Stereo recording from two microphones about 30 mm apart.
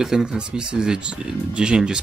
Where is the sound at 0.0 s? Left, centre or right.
Right.